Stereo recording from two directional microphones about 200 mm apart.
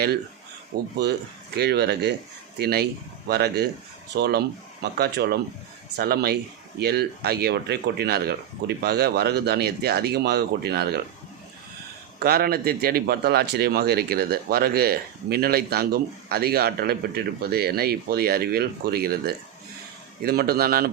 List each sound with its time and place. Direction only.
0.7 s a man's voice: 50° right (ahead or behind)
12.2 s a man's voice: 50° right (ahead or behind)